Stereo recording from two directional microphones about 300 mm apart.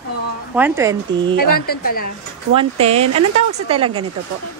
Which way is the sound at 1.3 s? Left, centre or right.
Left.